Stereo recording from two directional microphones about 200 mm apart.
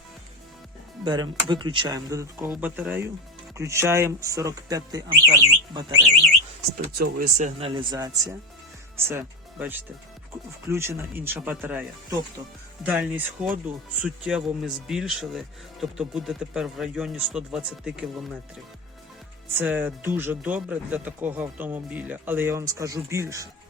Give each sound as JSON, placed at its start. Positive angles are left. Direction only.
{"t": 1.0, "sound": "speech", "side_deg": -20}
{"t": 6.9, "sound": "speech", "side_deg": -45}
{"t": 7.7, "sound": "speech", "side_deg": -20}
{"t": 19.5, "sound": "speech", "side_deg": -10}